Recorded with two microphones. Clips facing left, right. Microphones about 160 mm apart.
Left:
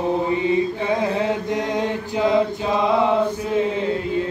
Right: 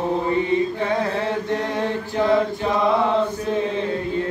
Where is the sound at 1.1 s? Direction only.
15° left (ahead or behind).